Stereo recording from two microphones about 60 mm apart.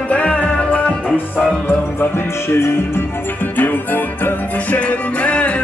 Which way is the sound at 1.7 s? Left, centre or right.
Left.